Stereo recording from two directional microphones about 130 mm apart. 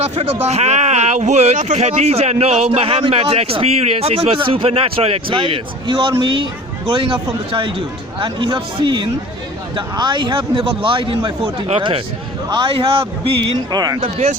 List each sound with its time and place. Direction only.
0.0 s a man's voice: 55° right (ahead or behind)
8.2 s a man's voice: 40° right (ahead or behind)
13.7 s speech: 30° right (ahead or behind)
14.0 s speech: 55° right (ahead or behind)